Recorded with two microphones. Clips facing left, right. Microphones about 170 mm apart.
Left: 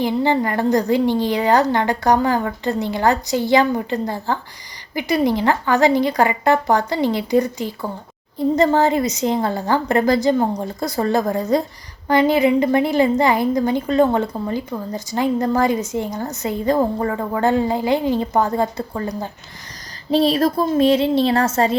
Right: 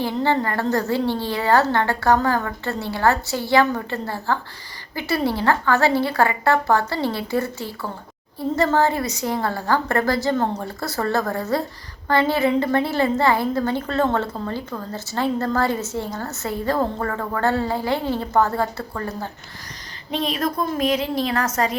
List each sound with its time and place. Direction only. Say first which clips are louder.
0.0 s a woman's voice: left 3 dB; 15° left (ahead or behind)
20.1 s a woman's voice: left 8 dB; 35° left (ahead or behind)